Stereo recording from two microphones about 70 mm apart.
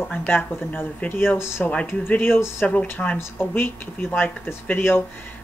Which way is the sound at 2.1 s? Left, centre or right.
Left.